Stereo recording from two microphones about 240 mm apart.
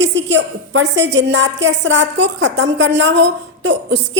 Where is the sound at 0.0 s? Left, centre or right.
Right.